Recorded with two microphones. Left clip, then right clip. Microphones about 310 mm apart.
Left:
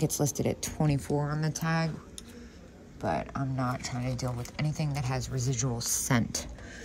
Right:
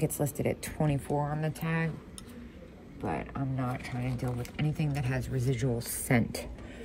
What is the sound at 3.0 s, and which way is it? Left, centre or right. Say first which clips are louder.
Speech: left 3 dB; centre.